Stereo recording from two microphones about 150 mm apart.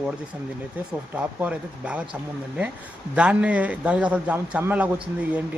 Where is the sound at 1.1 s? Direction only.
10° right (ahead or behind).